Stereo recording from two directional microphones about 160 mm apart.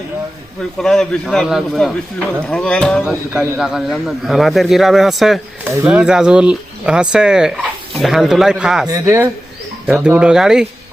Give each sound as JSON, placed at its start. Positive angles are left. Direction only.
{"t": 0.8, "sound": "speech", "side_deg": 0}
{"t": 8.9, "sound": "speech", "side_deg": -15}
{"t": 9.8, "sound": "speech", "side_deg": -5}